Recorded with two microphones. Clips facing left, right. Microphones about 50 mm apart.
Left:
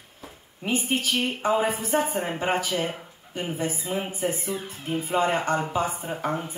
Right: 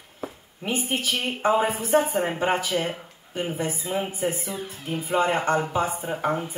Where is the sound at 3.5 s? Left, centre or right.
Right.